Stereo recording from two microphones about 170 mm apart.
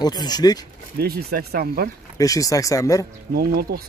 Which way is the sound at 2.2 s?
20° left (ahead or behind).